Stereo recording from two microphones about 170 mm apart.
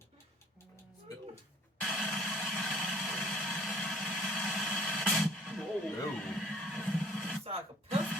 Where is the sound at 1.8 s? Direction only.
Centre (ahead or behind).